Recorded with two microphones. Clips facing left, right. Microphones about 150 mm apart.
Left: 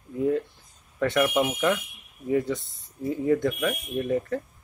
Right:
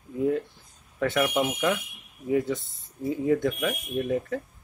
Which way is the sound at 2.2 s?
5° right (ahead or behind).